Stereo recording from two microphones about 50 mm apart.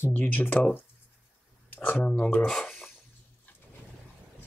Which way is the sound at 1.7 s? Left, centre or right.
Left.